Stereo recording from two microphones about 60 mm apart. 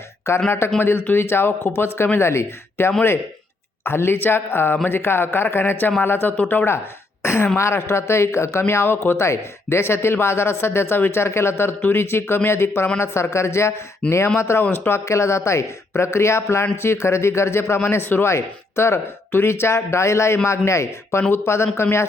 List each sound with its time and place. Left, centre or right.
0.3 s speech: left
14.0 s speech: centre
14.3 s speech: left